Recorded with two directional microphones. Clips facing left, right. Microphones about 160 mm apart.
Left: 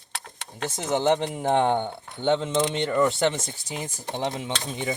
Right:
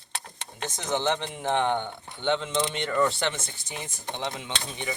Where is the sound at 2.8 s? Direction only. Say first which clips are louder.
Left 1 dB; 20° left (ahead or behind).